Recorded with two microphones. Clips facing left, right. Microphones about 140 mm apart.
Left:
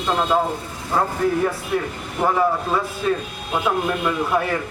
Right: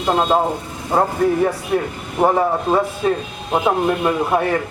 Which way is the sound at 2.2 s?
30° right (ahead or behind).